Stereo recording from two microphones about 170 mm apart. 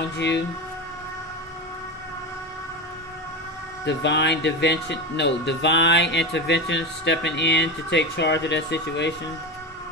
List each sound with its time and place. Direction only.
3.8 s speech: 90° left